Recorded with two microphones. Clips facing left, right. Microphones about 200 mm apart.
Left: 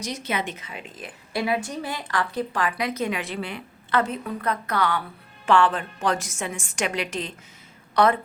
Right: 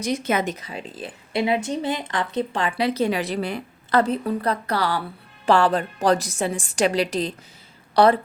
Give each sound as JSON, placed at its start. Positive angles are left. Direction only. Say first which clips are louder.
{"t": 0.0, "sound": "a woman's voice", "louder": "right 6 dB", "side_deg": -50}